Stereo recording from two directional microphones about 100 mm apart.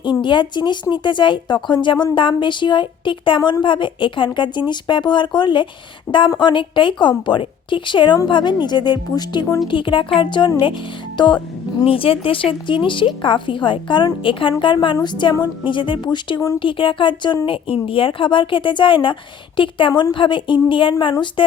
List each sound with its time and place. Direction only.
0.0 s a woman's voice: 50° left (ahead or behind)
11.9 s a woman's voice: 65° left (ahead or behind)